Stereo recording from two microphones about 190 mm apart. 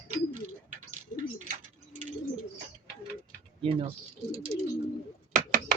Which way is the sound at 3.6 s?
30° right (ahead or behind).